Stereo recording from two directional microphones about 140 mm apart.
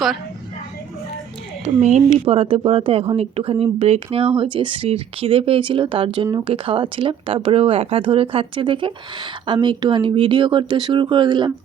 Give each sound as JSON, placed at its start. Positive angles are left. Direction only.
{"t": 1.6, "sound": "speech", "side_deg": -55}
{"t": 2.2, "sound": "speech", "side_deg": -45}